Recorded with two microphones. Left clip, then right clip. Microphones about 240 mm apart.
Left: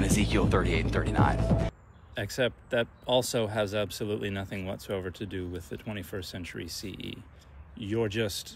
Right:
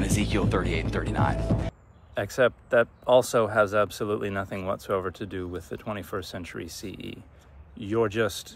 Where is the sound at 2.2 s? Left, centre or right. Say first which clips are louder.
Right 6 dB; centre.